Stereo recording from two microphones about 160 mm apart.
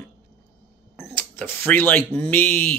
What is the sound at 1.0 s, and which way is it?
Speech, 10° left (ahead or behind).